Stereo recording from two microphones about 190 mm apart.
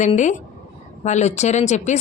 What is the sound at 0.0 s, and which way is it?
A woman's voice, 40° left (ahead or behind).